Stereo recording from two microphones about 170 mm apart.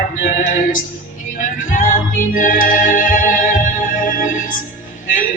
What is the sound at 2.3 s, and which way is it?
Organ, 50° left (ahead or behind).